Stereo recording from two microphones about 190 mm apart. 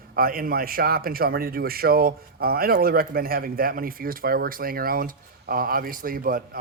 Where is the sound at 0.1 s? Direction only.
50° right (ahead or behind).